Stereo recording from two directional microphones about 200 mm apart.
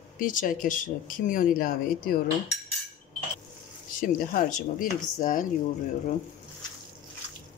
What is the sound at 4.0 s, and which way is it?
Speech, 40° left (ahead or behind).